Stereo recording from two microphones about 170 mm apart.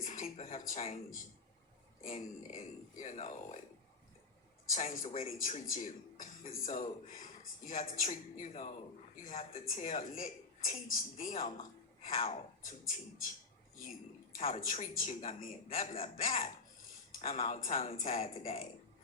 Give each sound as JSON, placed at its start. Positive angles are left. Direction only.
{"t": 0.0, "sound": "a woman's voice", "side_deg": 50}
{"t": 4.7, "sound": "a woman's voice", "side_deg": 50}
{"t": 12.1, "sound": "speech", "side_deg": 35}
{"t": 12.6, "sound": "a woman's voice", "side_deg": 50}
{"t": 14.4, "sound": "a woman's voice", "side_deg": 50}